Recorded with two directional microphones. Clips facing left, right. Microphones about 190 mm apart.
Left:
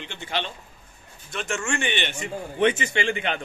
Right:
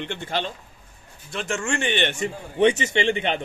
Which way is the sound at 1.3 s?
35° right (ahead or behind).